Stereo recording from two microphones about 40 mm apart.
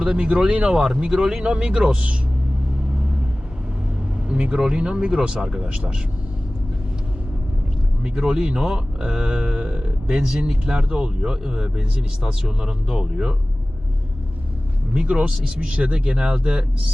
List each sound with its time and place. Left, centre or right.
0.0 s speech: right
4.3 s vehicle: right
4.5 s speech: centre
5.6 s speech: right
8.0 s speech: centre
14.9 s speech: right